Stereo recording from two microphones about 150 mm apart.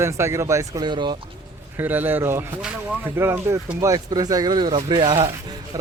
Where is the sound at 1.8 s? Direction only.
10° right (ahead or behind); by 5.3 s 35° right (ahead or behind).